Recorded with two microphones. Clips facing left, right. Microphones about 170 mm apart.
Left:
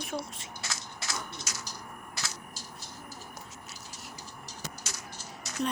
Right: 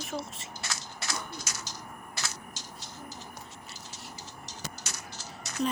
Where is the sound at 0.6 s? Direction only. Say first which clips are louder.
Right 1 dB; 60° right (ahead or behind).